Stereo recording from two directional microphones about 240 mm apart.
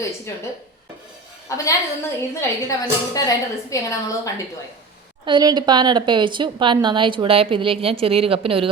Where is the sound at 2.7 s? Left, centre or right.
Centre.